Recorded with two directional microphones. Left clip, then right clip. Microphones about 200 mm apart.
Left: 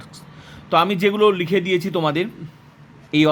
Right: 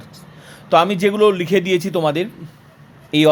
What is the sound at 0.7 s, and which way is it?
Speech, 5° right (ahead or behind).